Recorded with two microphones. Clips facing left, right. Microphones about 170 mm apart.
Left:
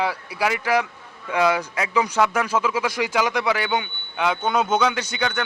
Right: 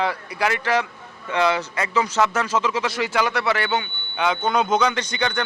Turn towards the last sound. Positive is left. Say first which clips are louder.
# right 1 dB
turn(degrees=5)  # may be behind; listen again after turning